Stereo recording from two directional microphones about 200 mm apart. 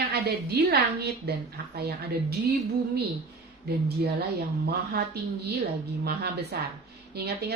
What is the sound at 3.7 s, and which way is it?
A woman's voice, 55° right (ahead or behind).